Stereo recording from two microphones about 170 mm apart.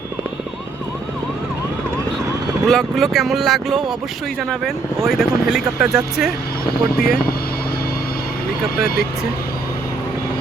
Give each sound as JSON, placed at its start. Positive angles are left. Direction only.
{"t": 2.6, "sound": "speech", "side_deg": 0}
{"t": 6.7, "sound": "speech", "side_deg": 60}